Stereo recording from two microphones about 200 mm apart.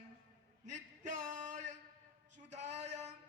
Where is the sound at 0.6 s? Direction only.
35° right (ahead or behind).